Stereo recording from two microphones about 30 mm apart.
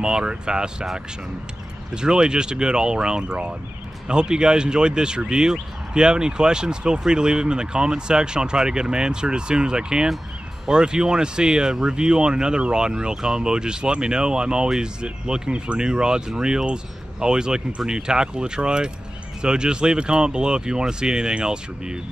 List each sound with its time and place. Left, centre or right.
0.0 s speech: right
2.0 s speech: right